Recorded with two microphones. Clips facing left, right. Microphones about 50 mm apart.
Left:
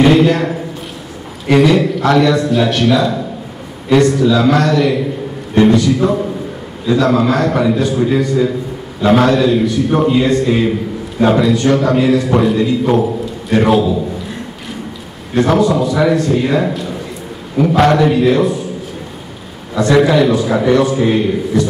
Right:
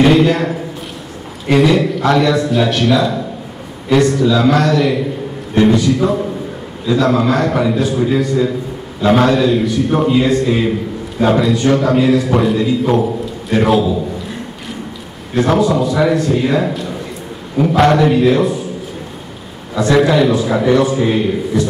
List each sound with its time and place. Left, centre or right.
0.0 s a man's voice: centre
15.3 s a man's voice: centre
19.7 s a man's voice: centre